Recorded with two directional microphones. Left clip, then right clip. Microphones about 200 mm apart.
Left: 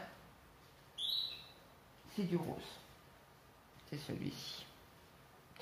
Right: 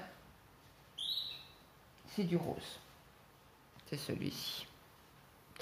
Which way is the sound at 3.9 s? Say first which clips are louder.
Right 4 dB; 50° right (ahead or behind).